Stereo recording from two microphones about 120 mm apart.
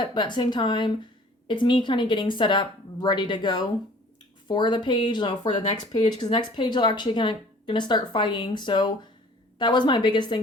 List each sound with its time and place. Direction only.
0.0 s speech: 40° left (ahead or behind)